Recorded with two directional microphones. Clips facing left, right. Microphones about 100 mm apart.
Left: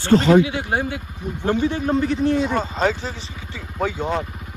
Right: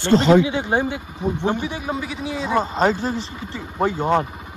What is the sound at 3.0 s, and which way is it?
Speech, 35° right (ahead or behind).